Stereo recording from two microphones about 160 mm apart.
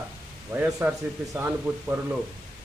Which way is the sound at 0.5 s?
10° right (ahead or behind).